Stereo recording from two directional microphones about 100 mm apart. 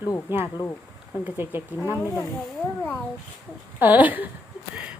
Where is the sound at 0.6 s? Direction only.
25° left (ahead or behind).